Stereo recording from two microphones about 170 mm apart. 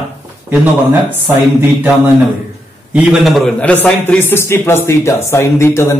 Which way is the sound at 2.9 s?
5° right (ahead or behind).